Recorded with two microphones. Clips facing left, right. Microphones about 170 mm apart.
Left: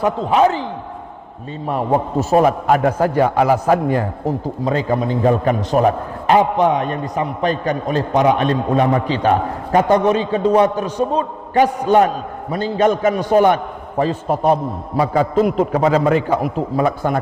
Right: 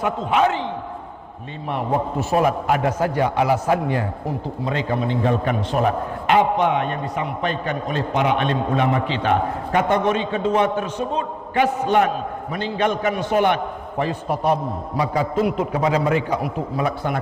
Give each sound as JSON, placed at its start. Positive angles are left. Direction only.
{"t": 0.0, "sound": "a man's voice", "side_deg": 35}
{"t": 1.6, "sound": "a man's voice", "side_deg": 40}
{"t": 14.9, "sound": "a man's voice", "side_deg": 45}